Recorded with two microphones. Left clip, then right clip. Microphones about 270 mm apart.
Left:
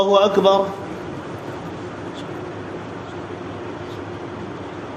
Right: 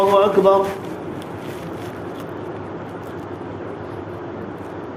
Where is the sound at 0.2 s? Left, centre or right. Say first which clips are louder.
Right 1 dB; left.